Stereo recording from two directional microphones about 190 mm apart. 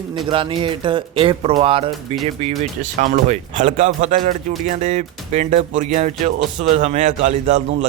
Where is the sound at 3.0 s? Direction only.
40° right (ahead or behind).